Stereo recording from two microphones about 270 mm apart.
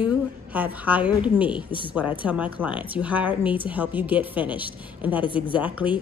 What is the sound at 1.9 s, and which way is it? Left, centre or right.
A woman's voice, centre.